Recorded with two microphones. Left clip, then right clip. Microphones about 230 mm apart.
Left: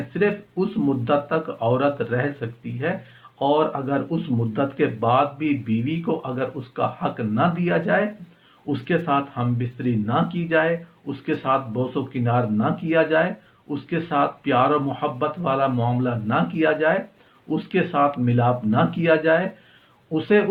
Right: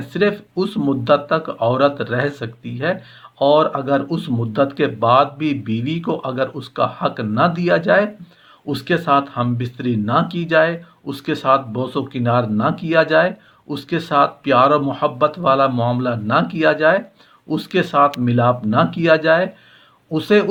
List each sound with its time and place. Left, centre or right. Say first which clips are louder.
0.1 s speech: right 5 dB; right